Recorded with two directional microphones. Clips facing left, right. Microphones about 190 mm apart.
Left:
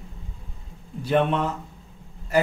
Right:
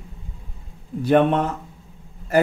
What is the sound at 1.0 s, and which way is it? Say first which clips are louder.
Speech: right 5 dB; 50° right (ahead or behind).